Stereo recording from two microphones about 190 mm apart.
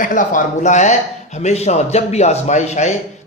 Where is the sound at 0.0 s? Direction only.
45° left (ahead or behind).